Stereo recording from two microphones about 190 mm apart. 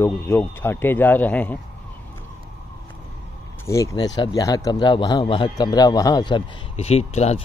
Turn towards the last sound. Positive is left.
turn(degrees=35)  # may be behind; listen again after turning